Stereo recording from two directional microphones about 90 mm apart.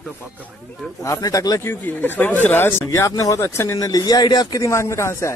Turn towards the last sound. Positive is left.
turn(degrees=30)  # may be behind; listen again after turning